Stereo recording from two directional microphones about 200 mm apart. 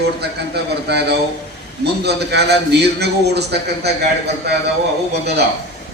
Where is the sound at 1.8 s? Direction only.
55° right (ahead or behind).